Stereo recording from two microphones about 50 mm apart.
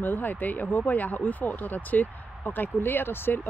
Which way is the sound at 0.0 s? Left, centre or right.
Left.